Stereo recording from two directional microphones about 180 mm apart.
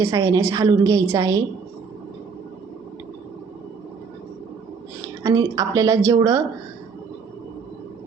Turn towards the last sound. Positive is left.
turn(degrees=-20)  # may be behind; listen again after turning